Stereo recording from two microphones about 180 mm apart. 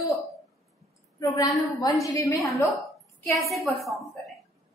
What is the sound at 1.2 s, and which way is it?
A woman's voice, 20° left (ahead or behind).